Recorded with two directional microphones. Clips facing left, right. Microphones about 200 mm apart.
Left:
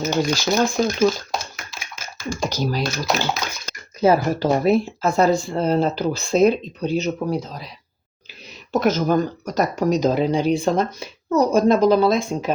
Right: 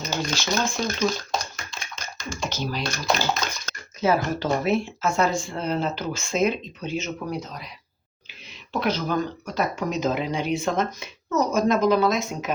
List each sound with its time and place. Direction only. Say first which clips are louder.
0.9 s a sound: left 6 dB; 5° left (ahead or behind)
2.3 s speech: left 6 dB; 40° left (ahead or behind)
2.8 s speech: left 2 dB; 5° left (ahead or behind)
4.0 s speech: left 6 dB; 35° left (ahead or behind)
8.7 s speech: left 6 dB; 45° left (ahead or behind)